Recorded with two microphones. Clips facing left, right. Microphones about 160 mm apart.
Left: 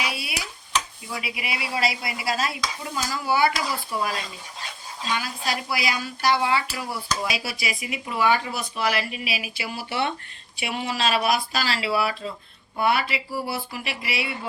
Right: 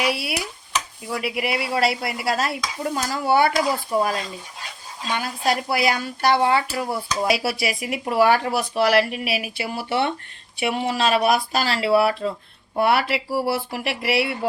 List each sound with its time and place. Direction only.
0.0 s speech: 70° right (ahead or behind)
5.1 s speech: 55° right (ahead or behind)
7.3 s speech: 65° right (ahead or behind)
12.8 s speech: 70° right (ahead or behind)